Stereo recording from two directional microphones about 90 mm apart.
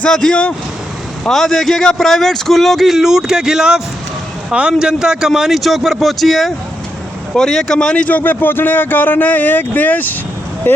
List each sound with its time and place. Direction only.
0.0 s a man's voice: 5° left (ahead or behind); by 10.8 s 25° left (ahead or behind)